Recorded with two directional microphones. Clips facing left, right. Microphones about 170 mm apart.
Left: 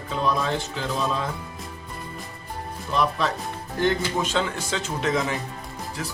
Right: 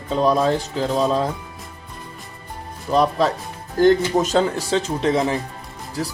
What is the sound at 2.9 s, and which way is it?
Speech, 35° right (ahead or behind).